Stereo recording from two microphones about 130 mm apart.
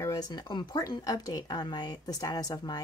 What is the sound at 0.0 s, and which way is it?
Speech, 30° left (ahead or behind).